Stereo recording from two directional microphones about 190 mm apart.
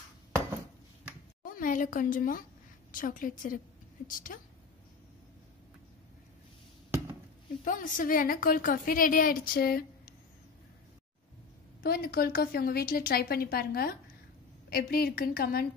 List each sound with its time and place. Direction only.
1.4 s a woman's voice: 45° left (ahead or behind)
7.6 s a woman's voice: 45° left (ahead or behind)
11.8 s a woman's voice: 55° left (ahead or behind)